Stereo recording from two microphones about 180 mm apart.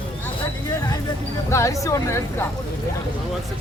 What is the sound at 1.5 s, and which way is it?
Speech, 15° left (ahead or behind).